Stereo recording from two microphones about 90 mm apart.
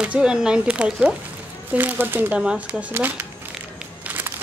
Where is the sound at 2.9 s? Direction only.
25° right (ahead or behind).